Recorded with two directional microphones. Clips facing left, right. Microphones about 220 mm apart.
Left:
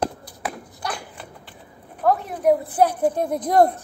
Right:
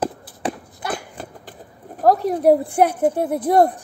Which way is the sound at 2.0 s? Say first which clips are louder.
Right 5 dB; 40° right (ahead or behind).